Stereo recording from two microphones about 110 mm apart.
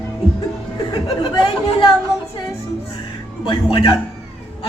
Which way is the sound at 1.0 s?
50° left (ahead or behind).